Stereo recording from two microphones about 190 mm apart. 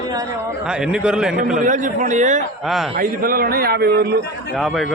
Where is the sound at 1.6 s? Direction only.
45° right (ahead or behind).